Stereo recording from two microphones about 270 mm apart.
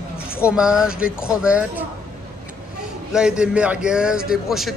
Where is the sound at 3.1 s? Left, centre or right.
Centre.